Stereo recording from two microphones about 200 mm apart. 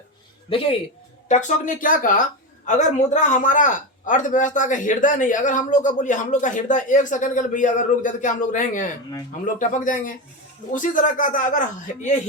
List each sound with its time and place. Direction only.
0.5 s speech: 25° left (ahead or behind)
1.3 s a man's voice: 35° left (ahead or behind)